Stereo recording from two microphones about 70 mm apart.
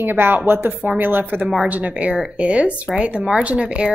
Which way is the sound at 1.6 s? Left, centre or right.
Centre.